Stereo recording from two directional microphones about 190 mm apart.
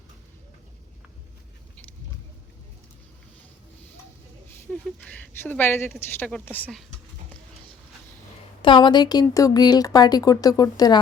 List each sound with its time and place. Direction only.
1.7 s a sound: 5° left (ahead or behind)
4.4 s a woman's voice: 10° left (ahead or behind)
8.6 s speech: 25° left (ahead or behind)